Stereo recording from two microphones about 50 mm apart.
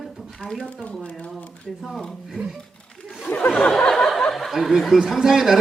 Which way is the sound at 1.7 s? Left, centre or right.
Centre.